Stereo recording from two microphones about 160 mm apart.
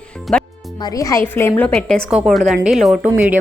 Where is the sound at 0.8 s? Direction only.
25° left (ahead or behind).